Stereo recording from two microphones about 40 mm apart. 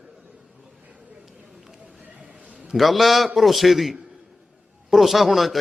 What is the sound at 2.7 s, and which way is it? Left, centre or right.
A man's voice, centre.